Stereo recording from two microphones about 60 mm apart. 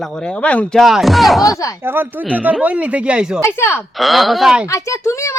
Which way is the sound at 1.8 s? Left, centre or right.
Right.